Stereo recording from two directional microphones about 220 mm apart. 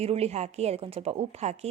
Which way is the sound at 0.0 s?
30° right (ahead or behind).